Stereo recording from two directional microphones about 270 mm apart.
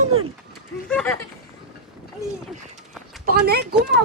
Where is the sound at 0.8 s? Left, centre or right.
Centre.